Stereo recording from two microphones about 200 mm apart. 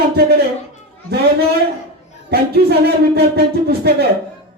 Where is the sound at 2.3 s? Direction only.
50° right (ahead or behind).